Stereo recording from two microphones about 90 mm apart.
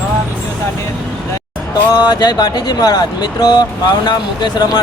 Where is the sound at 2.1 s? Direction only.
50° left (ahead or behind).